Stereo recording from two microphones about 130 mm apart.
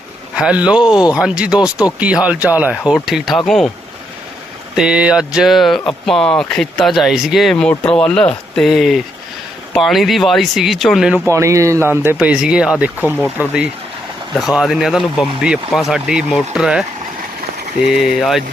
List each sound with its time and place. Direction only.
0.3 s speech: 5° right (ahead or behind)
4.7 s speech: 5° right (ahead or behind)
11.3 s speech: 25° right (ahead or behind)
14.3 s speech: centre (ahead or behind)
17.8 s speech: centre (ahead or behind)